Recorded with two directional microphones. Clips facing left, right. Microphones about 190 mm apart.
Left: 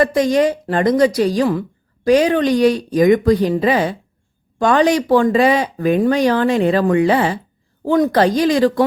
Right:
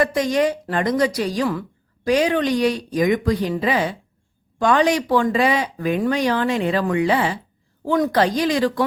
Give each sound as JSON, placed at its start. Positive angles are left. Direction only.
{"t": 0.0, "sound": "speech", "side_deg": 35}